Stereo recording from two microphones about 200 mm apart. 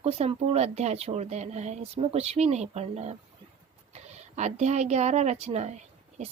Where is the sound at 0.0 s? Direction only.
30° right (ahead or behind).